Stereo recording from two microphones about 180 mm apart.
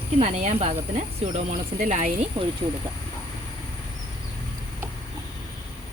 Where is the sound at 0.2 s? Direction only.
40° right (ahead or behind).